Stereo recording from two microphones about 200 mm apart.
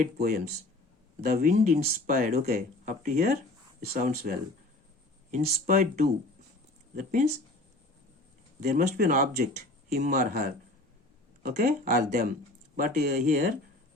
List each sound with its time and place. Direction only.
0.0 s speech: 40° right (ahead or behind)
8.6 s speech: 45° right (ahead or behind)